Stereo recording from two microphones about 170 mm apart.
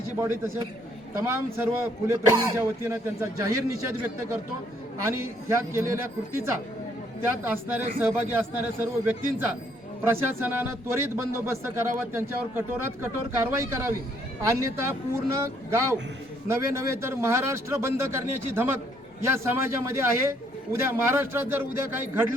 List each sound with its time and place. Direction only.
0.2 s speech: 15° right (ahead or behind)